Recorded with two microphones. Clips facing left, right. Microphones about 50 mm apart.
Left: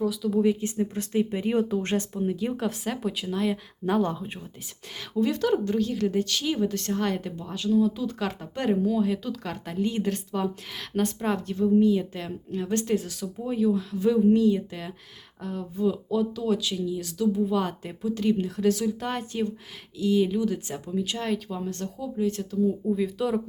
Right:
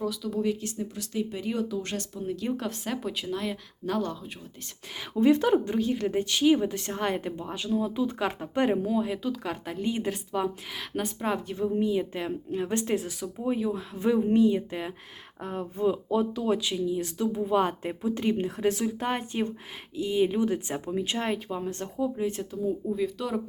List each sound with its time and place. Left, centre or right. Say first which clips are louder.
0.0 s speech: left 5 dB; centre
0.6 s speech: left 6 dB; left
2.2 s speech: left 3 dB; centre
3.8 s speech: left 5 dB; left
5.1 s speech: right 3 dB; right
22.9 s speech: left 3 dB; centre